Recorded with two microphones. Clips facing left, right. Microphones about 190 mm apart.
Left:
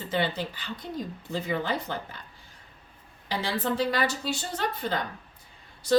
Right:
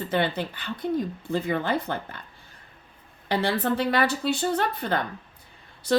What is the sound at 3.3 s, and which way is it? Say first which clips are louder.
A woman's voice: right 4 dB; 60° right (ahead or behind).